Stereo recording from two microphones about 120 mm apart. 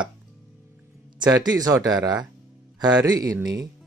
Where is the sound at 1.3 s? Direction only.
35° right (ahead or behind).